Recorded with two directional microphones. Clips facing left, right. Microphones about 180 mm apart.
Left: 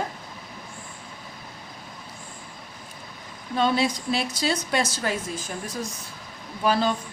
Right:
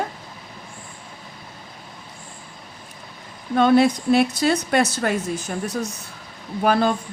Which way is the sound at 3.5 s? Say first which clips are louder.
Right 7 dB; 55° right (ahead or behind).